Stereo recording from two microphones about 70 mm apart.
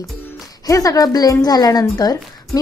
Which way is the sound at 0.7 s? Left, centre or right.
Left.